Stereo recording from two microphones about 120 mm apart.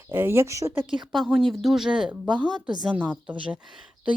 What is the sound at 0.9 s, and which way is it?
Speech, centre (ahead or behind).